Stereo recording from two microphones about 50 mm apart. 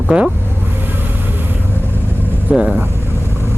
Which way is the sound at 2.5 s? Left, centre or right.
Centre.